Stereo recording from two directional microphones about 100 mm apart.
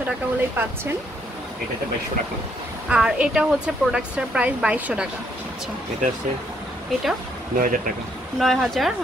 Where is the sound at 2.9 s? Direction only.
10° right (ahead or behind).